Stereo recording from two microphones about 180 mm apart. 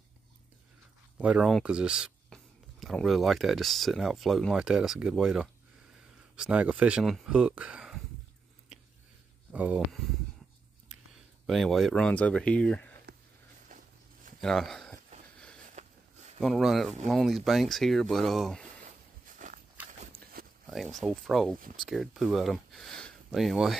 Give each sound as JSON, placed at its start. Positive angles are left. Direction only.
{"t": 1.1, "sound": "speech", "side_deg": -5}
{"t": 9.5, "sound": "speech", "side_deg": -10}
{"t": 11.4, "sound": "speech", "side_deg": 0}
{"t": 14.4, "sound": "speech", "side_deg": 0}
{"t": 15.7, "sound": "a sound", "side_deg": -40}
{"t": 16.3, "sound": "speech", "side_deg": 0}
{"t": 19.3, "sound": "walk", "side_deg": -45}
{"t": 20.4, "sound": "a sound", "side_deg": -55}
{"t": 20.7, "sound": "speech", "side_deg": 0}